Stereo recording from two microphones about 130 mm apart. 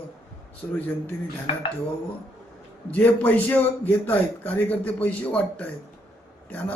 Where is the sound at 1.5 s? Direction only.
45° left (ahead or behind).